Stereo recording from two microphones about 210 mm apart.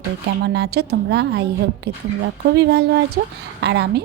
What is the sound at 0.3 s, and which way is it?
A woman's voice, 55° right (ahead or behind).